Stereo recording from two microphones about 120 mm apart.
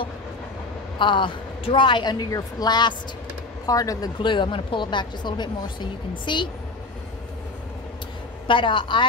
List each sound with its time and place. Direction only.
0.9 s a woman's voice: 40° left (ahead or behind)
4.2 s a woman's voice: 40° left (ahead or behind)
8.5 s a woman's voice: 45° left (ahead or behind)